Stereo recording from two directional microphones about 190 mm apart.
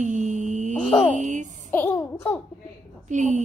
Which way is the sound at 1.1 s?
40° right (ahead or behind).